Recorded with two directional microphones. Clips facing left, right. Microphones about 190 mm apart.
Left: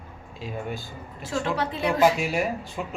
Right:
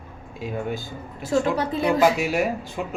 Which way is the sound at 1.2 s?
45° right (ahead or behind).